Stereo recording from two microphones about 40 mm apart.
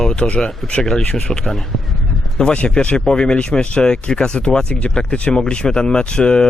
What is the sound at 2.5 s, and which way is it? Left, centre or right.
Speech, left.